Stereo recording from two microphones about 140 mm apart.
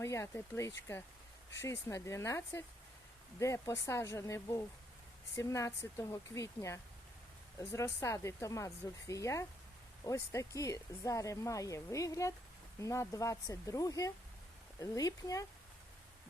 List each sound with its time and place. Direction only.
0.0 s speech: 20° left (ahead or behind)